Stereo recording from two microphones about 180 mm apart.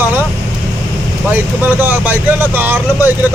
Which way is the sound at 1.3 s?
10° right (ahead or behind).